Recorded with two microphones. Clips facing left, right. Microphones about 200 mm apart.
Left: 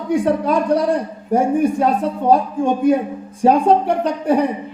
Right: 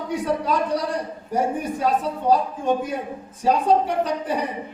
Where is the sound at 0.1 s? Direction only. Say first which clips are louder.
Left 7 dB; 50° left (ahead or behind).